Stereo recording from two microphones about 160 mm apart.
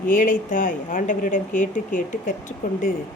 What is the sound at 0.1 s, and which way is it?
Speech, 60° left (ahead or behind).